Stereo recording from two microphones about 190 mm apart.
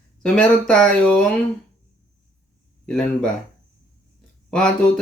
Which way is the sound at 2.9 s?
5° left (ahead or behind).